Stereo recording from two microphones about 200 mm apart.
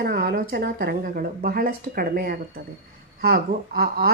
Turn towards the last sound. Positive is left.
turn(degrees=-50)  # may be behind; listen again after turning